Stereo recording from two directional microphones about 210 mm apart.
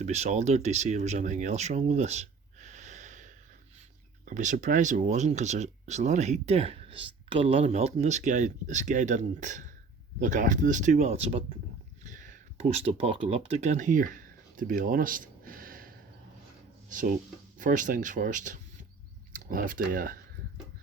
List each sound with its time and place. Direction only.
0.0 s speech: 35° right (ahead or behind)
17.6 s speech: 40° right (ahead or behind)